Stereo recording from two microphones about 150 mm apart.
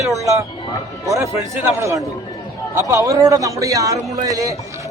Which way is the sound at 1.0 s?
20° right (ahead or behind).